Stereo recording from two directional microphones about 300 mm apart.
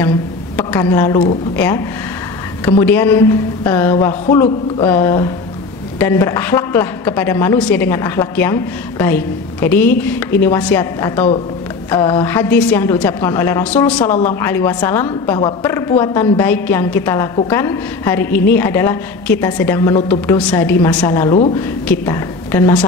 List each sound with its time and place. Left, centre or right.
0.6 s speech: centre
2.6 s a woman's voice: centre
21.4 s a woman's voice: left
21.8 s a woman's voice: centre